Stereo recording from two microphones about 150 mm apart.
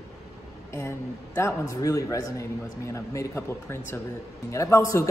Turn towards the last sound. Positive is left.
turn(degrees=20)  # may be behind; listen again after turning